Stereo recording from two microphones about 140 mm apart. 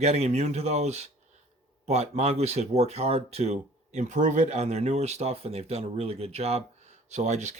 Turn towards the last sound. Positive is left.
turn(degrees=-55)  # may be behind; listen again after turning